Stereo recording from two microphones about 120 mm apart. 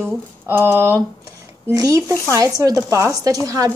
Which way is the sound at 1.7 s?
30° right (ahead or behind).